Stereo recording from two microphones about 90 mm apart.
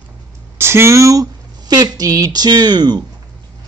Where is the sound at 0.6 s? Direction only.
30° right (ahead or behind); by 3.0 s 50° right (ahead or behind).